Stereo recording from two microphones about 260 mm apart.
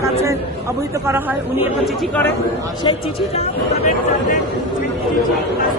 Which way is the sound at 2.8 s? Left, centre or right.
Left.